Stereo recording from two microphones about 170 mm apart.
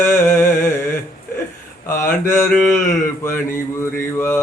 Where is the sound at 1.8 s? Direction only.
15° left (ahead or behind).